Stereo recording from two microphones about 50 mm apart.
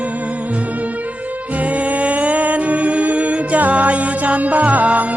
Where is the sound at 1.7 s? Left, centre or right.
Right.